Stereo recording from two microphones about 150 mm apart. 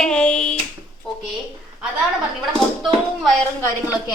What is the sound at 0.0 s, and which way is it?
Hands, 5° left (ahead or behind).